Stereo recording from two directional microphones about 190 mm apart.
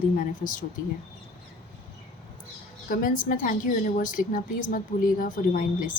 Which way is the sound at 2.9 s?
45° left (ahead or behind).